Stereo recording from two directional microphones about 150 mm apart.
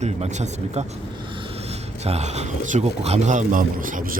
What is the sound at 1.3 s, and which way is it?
Speech, 35° right (ahead or behind).